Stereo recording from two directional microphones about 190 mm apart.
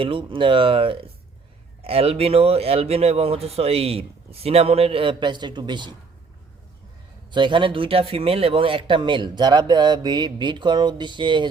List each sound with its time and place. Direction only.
0.0 s speech: 25° right (ahead or behind)
7.3 s speech: 25° right (ahead or behind)